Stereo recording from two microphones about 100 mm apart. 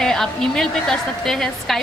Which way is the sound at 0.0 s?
5° left (ahead or behind).